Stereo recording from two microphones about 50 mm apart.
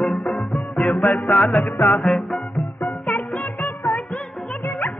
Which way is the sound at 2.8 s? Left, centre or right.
Left.